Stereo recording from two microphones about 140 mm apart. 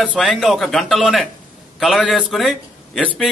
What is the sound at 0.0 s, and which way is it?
A man's voice, 5° left (ahead or behind).